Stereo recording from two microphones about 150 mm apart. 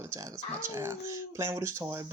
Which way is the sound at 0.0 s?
20° right (ahead or behind).